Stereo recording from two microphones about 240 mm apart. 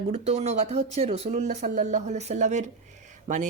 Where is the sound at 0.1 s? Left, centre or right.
Right.